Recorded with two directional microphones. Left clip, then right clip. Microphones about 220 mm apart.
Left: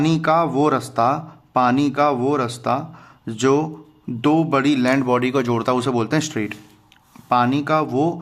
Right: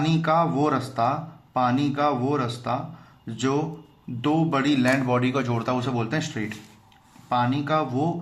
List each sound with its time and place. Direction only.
0.0 s speech: 35° left (ahead or behind)